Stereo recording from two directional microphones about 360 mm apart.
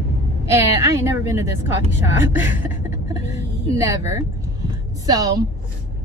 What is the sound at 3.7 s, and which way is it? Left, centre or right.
A woman's voice, centre.